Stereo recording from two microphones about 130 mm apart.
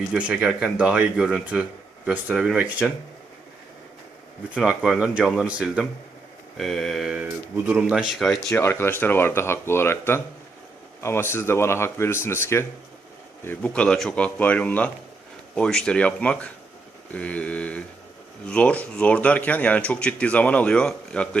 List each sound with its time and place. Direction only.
0.1 s speech: 10° right (ahead or behind)
4.5 s speech: 5° right (ahead or behind)
7.2 s speech: 10° right (ahead or behind)
8.4 s speech: 20° left (ahead or behind)